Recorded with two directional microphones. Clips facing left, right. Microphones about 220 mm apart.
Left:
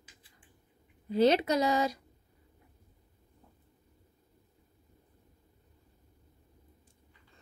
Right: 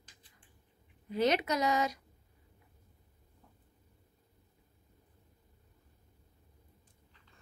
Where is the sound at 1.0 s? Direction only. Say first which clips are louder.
Left 5 dB; 30° left (ahead or behind).